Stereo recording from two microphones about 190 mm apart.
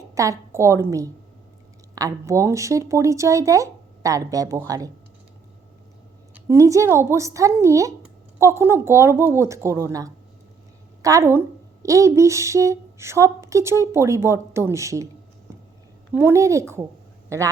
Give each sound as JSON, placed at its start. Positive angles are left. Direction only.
{"t": 0.1, "sound": "a woman's voice", "side_deg": -15}
{"t": 6.3, "sound": "speech", "side_deg": -15}
{"t": 16.1, "sound": "a man's voice", "side_deg": -15}